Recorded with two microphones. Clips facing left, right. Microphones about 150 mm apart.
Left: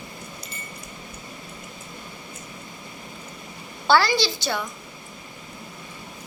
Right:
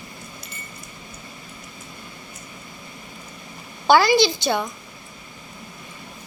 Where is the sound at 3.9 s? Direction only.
15° right (ahead or behind).